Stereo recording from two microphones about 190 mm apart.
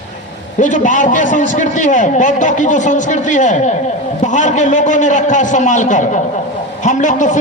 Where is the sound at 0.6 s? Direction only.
40° left (ahead or behind).